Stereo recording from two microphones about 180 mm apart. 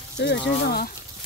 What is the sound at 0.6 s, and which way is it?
Speech, 60° left (ahead or behind).